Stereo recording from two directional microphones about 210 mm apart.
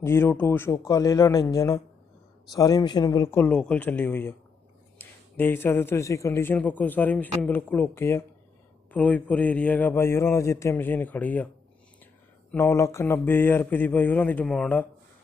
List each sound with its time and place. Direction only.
0.0 s a man's voice: 10° left (ahead or behind)
12.5 s a man's voice: 10° left (ahead or behind)